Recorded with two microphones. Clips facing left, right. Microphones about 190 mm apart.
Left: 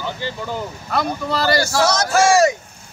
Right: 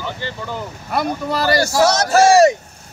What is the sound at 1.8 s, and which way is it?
Speech, 40° right (ahead or behind).